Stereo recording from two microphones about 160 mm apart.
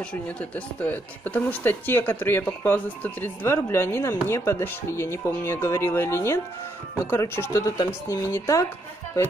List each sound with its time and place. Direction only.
0.1 s speech: 10° left (ahead or behind)